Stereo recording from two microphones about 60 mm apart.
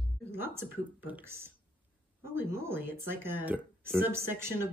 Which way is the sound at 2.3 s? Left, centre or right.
Right.